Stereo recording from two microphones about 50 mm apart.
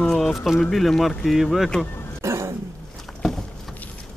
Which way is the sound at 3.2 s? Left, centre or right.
Centre.